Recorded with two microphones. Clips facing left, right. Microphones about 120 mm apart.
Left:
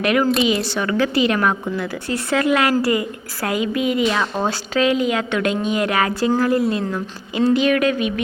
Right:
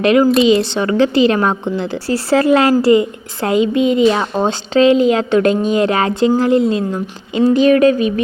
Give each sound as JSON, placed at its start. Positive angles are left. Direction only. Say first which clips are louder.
{"t": 0.0, "sound": "a woman's voice", "louder": "right 6 dB", "side_deg": -25}
{"t": 7.5, "sound": "speech", "louder": "right 8 dB", "side_deg": -35}